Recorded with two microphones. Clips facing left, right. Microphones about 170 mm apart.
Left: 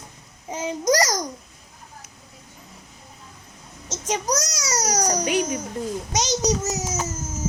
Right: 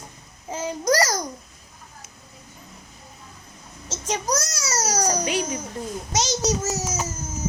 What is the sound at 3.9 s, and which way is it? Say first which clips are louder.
A child's voice: left 1 dB; 20° left (ahead or behind).